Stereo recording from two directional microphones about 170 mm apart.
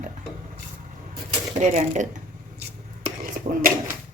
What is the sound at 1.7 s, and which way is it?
Speech, 45° right (ahead or behind).